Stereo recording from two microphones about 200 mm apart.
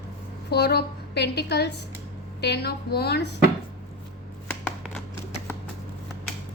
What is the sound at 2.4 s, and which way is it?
Speech, 55° left (ahead or behind).